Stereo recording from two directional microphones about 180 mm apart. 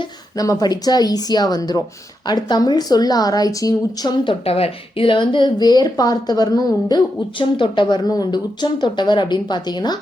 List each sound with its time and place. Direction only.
0.0 s speech: 20° left (ahead or behind)